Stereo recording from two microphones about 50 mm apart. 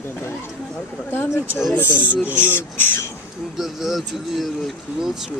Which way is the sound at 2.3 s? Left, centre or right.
Left.